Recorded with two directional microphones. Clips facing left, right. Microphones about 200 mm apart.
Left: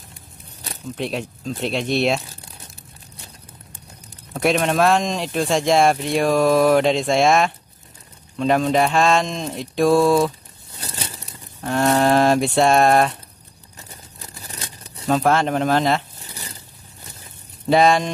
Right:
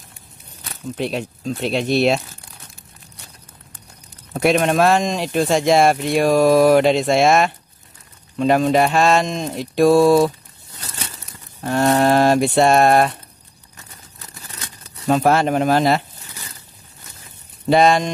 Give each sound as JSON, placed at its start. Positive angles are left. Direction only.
{"t": 0.9, "sound": "speech", "side_deg": 0}
{"t": 4.4, "sound": "speech", "side_deg": 0}
{"t": 10.8, "sound": "crumpling", "side_deg": 30}
{"t": 11.6, "sound": "speech", "side_deg": 0}
{"t": 13.7, "sound": "tearing", "side_deg": 30}
{"t": 15.0, "sound": "speech", "side_deg": -10}
{"t": 17.6, "sound": "speech", "side_deg": 0}